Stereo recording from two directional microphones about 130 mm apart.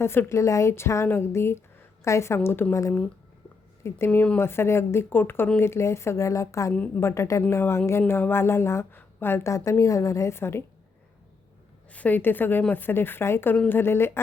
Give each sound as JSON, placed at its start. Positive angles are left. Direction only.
{"t": 0.0, "sound": "speech", "side_deg": 20}
{"t": 6.7, "sound": "speech", "side_deg": 10}
{"t": 11.9, "sound": "speech", "side_deg": 10}